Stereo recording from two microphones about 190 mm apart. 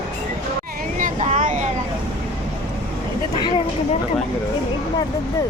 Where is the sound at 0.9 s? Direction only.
40° right (ahead or behind).